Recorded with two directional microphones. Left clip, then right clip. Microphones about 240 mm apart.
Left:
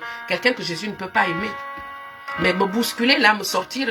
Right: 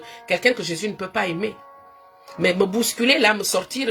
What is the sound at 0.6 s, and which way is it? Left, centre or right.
Speech, centre.